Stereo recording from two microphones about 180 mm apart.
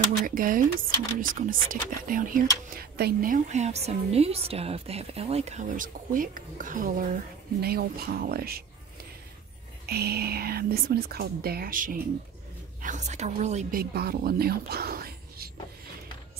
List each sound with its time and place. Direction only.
0.3 s speech: 50° right (ahead or behind)
7.6 s speech: 60° right (ahead or behind)
9.8 s a woman's voice: 60° right (ahead or behind); by 13.7 s 40° right (ahead or behind)
13.7 s speech: 60° right (ahead or behind)